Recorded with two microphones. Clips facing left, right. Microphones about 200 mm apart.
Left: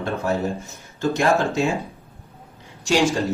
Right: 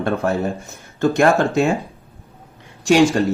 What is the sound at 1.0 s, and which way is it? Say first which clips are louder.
Speech: right 4 dB; 55° right (ahead or behind).